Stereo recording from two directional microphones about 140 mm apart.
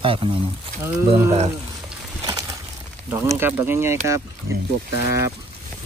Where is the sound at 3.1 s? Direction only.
15° right (ahead or behind).